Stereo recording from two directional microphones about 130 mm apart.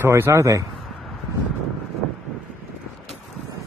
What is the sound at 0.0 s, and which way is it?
Speech, 20° right (ahead or behind).